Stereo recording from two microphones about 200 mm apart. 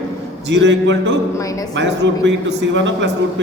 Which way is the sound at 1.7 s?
65° right (ahead or behind).